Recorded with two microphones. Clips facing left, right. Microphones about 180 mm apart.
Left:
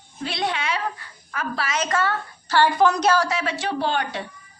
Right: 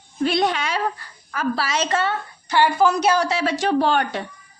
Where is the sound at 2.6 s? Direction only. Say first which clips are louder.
Right 1 dB; 5° right (ahead or behind).